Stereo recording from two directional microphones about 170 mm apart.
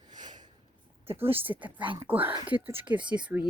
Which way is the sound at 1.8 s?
30° right (ahead or behind).